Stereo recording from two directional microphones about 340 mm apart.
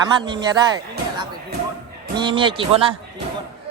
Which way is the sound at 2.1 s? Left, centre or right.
Centre.